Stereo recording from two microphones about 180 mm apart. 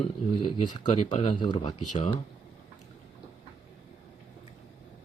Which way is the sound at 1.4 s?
25° left (ahead or behind).